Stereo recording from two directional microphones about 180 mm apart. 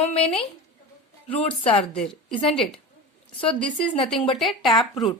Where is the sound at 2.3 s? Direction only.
30° left (ahead or behind).